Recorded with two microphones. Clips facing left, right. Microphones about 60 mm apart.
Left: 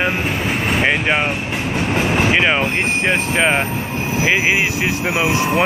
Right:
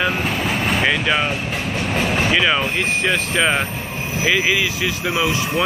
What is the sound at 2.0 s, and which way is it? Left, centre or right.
Vehicle, centre.